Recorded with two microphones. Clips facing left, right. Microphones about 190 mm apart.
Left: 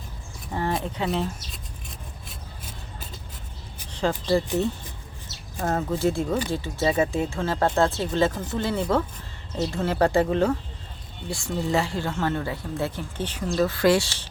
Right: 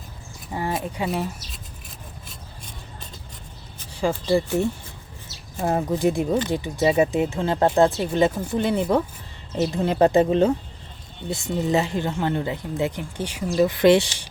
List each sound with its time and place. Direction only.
0.5 s speech: 5° right (ahead or behind)
5.5 s speech: 15° right (ahead or behind)